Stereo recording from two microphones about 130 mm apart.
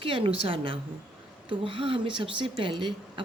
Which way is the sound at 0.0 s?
40° right (ahead or behind).